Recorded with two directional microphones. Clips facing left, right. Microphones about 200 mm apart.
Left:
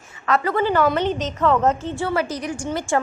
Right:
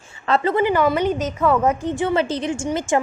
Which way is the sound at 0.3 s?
25° right (ahead or behind).